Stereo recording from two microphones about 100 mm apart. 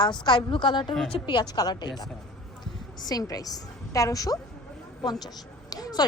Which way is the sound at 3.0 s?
40° left (ahead or behind).